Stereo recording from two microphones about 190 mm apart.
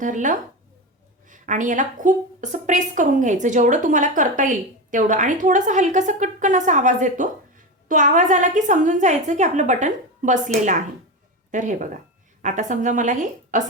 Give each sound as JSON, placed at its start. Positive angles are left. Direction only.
{"t": 0.0, "sound": "a woman's voice", "side_deg": -40}